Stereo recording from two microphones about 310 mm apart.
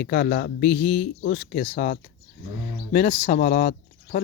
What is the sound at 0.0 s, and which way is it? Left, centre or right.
Speech, left.